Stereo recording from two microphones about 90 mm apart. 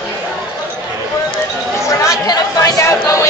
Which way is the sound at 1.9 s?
40° left (ahead or behind).